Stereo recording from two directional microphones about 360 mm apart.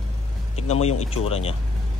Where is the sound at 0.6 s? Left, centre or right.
Centre.